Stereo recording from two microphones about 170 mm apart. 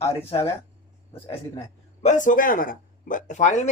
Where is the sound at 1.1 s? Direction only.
25° left (ahead or behind).